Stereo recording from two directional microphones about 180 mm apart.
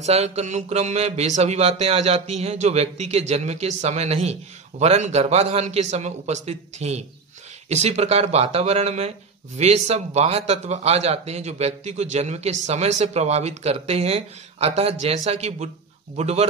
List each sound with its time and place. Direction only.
0.0 s mantra: 35° right (ahead or behind)